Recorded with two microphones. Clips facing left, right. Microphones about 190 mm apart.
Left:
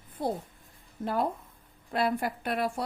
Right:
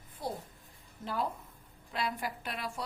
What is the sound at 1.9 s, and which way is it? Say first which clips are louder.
Speech: left 8 dB; 55° left (ahead or behind).